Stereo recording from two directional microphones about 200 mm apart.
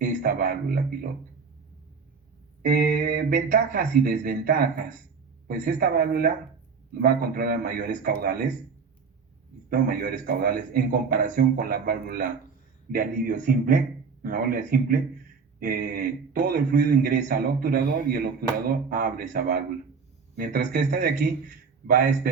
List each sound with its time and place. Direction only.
0.0 s a man's voice: 45° right (ahead or behind)
2.6 s a man's voice: 45° right (ahead or behind)
9.6 s a man's voice: 45° right (ahead or behind)